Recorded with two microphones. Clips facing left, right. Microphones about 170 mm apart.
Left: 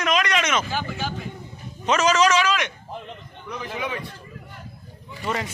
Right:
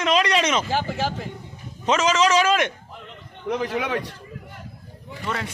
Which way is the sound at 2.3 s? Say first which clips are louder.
Right 3 dB; 45° right (ahead or behind).